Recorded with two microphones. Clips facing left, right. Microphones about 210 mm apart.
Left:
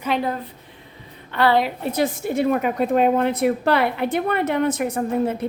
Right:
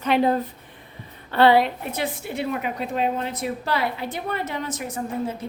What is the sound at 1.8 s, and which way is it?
A woman's voice, 40° left (ahead or behind).